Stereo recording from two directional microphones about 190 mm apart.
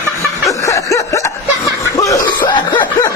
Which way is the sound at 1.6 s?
15° left (ahead or behind).